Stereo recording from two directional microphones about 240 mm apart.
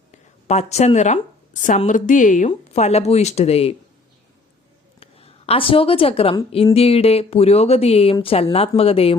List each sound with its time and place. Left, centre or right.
0.1 s a woman's voice: left
4.9 s a woman's voice: left